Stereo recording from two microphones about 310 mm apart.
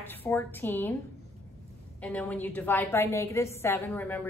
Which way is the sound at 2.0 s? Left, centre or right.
Centre.